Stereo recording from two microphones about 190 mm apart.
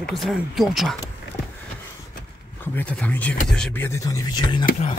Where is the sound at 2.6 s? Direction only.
10° left (ahead or behind).